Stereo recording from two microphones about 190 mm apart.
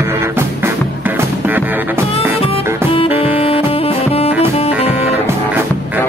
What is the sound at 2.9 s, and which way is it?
Music, 30° left (ahead or behind).